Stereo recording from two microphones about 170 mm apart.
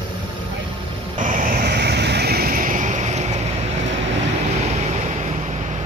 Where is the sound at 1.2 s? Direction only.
50° right (ahead or behind).